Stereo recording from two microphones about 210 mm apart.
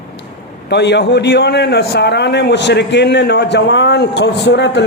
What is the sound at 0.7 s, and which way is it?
A man's voice, 55° left (ahead or behind).